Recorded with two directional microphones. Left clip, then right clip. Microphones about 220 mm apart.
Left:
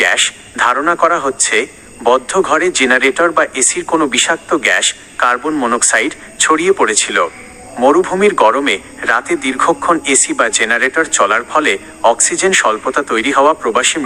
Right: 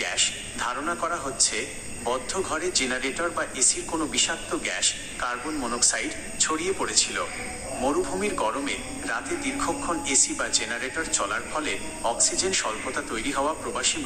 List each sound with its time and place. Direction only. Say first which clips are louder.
0.0 s speech: left 14 dB; 40° left (ahead or behind)